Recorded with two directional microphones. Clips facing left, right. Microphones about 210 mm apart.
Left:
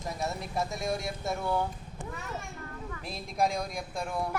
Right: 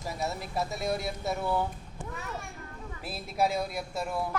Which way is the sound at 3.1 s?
5° right (ahead or behind).